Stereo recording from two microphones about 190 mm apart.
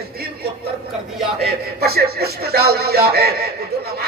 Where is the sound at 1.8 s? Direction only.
55° right (ahead or behind).